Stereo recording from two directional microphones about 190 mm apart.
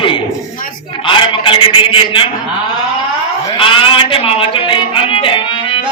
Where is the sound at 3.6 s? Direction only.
30° left (ahead or behind).